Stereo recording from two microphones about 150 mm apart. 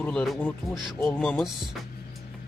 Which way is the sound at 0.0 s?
5° left (ahead or behind).